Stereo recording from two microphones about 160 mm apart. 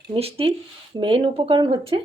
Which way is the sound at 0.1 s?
35° right (ahead or behind).